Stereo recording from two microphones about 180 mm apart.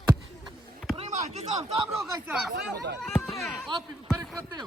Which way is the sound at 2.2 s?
5° right (ahead or behind).